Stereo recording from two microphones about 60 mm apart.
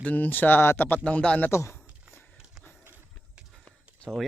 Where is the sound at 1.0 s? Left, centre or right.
Left.